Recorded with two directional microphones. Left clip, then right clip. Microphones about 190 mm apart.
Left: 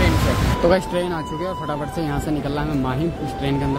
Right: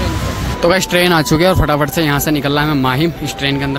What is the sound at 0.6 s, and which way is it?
Speech, 15° right (ahead or behind).